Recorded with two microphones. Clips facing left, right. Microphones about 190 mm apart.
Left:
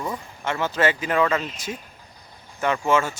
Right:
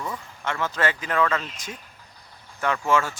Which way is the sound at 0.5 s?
25° left (ahead or behind).